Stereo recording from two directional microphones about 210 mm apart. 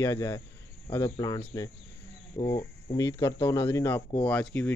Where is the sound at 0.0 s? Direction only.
15° left (ahead or behind).